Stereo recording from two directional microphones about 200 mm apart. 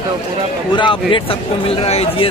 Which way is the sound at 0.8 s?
25° left (ahead or behind).